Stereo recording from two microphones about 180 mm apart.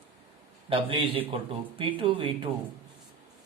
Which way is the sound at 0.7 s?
30° right (ahead or behind).